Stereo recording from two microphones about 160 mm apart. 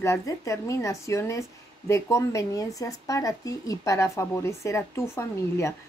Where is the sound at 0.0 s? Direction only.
20° left (ahead or behind).